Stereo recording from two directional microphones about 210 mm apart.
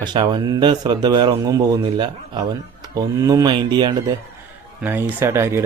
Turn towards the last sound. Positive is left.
turn(degrees=-10)  # may be behind; listen again after turning